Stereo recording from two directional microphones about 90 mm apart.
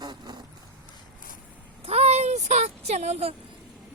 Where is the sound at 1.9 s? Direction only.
90° right.